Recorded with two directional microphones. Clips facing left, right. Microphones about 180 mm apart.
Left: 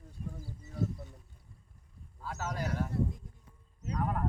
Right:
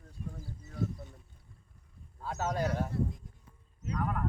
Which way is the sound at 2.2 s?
25° right (ahead or behind).